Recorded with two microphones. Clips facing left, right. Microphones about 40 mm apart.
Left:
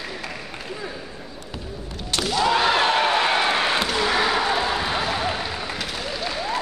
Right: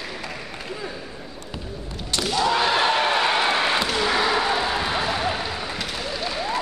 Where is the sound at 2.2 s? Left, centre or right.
Centre.